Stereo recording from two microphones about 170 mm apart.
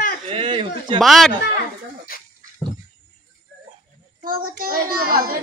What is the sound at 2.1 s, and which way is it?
Dog, 60° left (ahead or behind).